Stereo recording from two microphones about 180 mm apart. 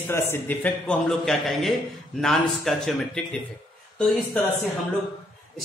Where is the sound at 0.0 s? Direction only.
10° left (ahead or behind).